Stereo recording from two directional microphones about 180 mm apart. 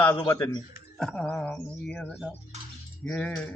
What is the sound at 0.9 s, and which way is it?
Music, 5° left (ahead or behind).